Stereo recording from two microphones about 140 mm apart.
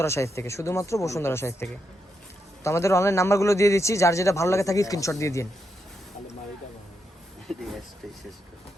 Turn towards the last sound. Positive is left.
turn(degrees=0)  # may be behind; listen again after turning